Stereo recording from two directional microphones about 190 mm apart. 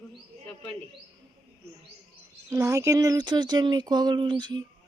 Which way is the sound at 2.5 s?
15° right (ahead or behind).